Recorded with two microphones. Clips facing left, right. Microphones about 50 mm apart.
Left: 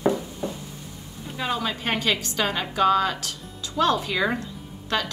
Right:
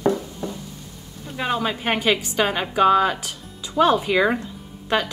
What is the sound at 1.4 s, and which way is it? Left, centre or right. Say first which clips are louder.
A woman's voice: right 3 dB; centre.